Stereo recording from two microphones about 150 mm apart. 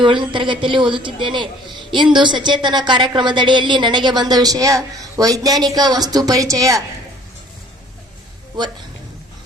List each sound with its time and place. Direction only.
0.0 s a woman's voice: 35° right (ahead or behind)